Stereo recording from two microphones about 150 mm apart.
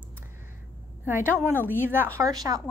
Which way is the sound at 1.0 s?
15° right (ahead or behind).